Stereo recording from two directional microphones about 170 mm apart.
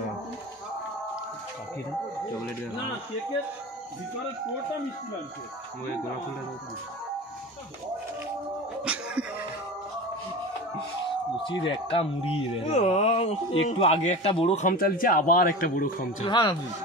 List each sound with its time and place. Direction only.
8.8 s music: 5° right (ahead or behind)
11.6 s speech: 30° left (ahead or behind); by 16.3 s 55° left (ahead or behind)
16.3 s speech: 25° left (ahead or behind)